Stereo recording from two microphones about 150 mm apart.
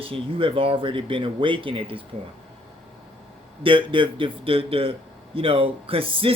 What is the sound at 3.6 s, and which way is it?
A man's voice, 35° right (ahead or behind).